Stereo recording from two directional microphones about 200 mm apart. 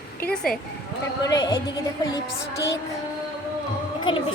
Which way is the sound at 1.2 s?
20° left (ahead or behind).